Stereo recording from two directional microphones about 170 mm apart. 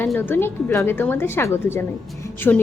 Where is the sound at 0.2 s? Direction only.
15° left (ahead or behind).